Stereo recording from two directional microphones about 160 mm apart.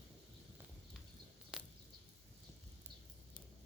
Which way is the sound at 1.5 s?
5° right (ahead or behind).